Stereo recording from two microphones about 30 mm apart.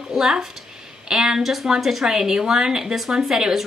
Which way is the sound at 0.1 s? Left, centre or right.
Centre.